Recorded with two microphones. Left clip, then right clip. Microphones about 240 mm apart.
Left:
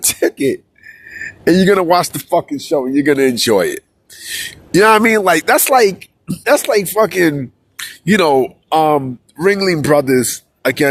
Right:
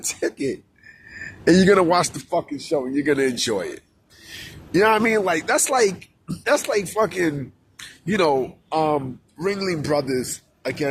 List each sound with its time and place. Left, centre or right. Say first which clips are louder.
0.1 s speech: left 9 dB; left